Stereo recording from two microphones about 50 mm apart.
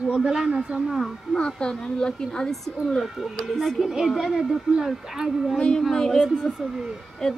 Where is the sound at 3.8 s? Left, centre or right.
Centre.